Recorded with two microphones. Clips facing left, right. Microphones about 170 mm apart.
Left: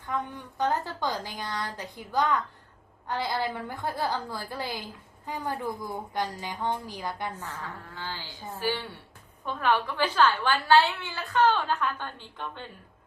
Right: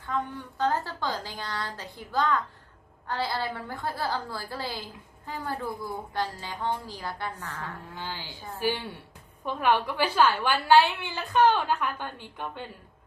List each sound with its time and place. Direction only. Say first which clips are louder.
0.1 s a woman's voice: right 1 dB; 15° left (ahead or behind)
7.9 s a woman's voice: right 1 dB; 15° right (ahead or behind)